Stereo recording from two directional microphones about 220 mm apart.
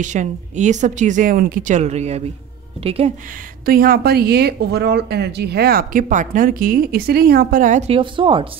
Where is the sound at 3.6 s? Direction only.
40° right (ahead or behind).